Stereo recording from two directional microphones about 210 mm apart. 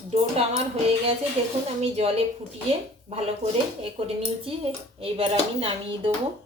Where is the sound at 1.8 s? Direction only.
30° right (ahead or behind).